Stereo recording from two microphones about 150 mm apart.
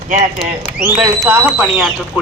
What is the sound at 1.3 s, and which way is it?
Speech, 10° right (ahead or behind).